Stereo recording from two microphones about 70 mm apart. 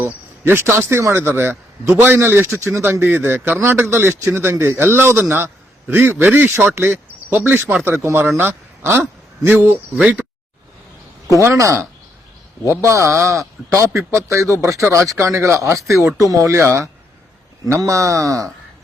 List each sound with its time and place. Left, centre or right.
0.0 s a man's voice: right
11.3 s speech: right
17.7 s speech: right